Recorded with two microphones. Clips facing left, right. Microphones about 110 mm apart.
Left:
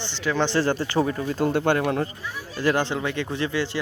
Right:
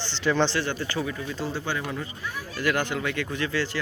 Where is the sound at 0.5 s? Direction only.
35° left (ahead or behind); by 2.1 s 60° left (ahead or behind).